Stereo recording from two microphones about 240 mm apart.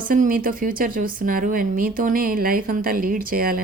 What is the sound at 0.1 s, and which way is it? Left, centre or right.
Speech, right.